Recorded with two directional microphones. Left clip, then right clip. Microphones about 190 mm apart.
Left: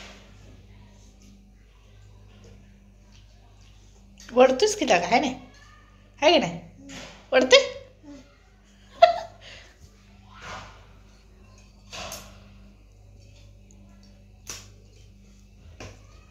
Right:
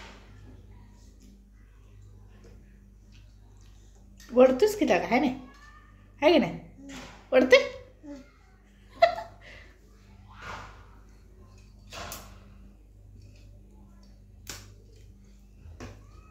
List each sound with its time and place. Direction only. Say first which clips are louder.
4.3 s a woman's voice: left 2 dB; 25° right (ahead or behind)
8.9 s laughter: left 5 dB; 30° right (ahead or behind)